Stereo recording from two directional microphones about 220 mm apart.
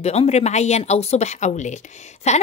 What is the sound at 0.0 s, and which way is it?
Speech, 30° left (ahead or behind).